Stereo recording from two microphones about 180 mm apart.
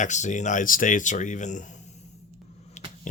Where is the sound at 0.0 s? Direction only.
40° left (ahead or behind).